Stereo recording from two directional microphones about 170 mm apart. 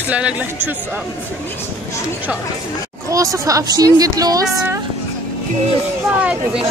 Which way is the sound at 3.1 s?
20° right (ahead or behind).